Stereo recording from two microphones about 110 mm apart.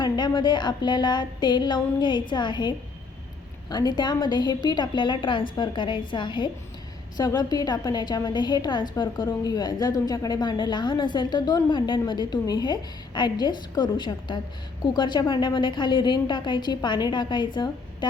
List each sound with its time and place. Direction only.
0.0 s a woman's voice: 45° left (ahead or behind)